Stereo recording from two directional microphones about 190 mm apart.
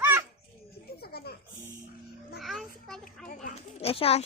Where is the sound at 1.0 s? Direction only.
55° left (ahead or behind).